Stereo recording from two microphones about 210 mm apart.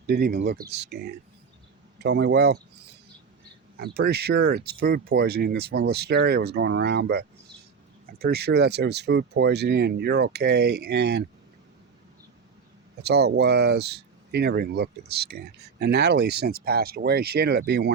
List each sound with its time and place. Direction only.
0.1 s speech: 50° right (ahead or behind)
3.8 s speech: 50° right (ahead or behind)
13.0 s speech: 50° right (ahead or behind)